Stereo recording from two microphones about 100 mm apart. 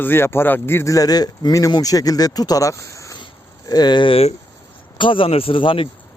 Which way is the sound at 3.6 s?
40° left (ahead or behind).